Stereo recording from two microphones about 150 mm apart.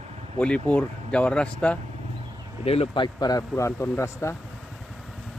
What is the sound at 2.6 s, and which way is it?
Speech, 40° left (ahead or behind).